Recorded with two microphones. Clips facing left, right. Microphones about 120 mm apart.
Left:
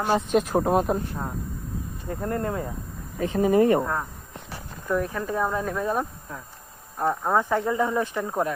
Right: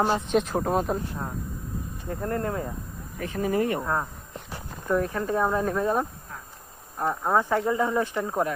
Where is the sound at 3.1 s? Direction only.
20° left (ahead or behind).